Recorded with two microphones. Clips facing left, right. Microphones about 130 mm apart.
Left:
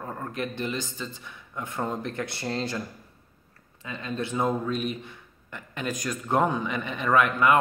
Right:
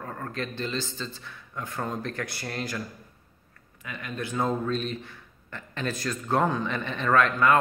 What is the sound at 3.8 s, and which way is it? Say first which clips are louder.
Speech: left 3 dB; 25° left (ahead or behind).